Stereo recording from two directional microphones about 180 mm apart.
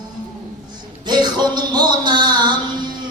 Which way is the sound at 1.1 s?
25° right (ahead or behind).